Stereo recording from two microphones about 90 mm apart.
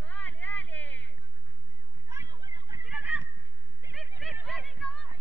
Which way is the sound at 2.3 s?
55° right (ahead or behind).